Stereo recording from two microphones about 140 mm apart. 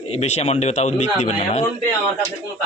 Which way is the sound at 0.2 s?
50° left (ahead or behind).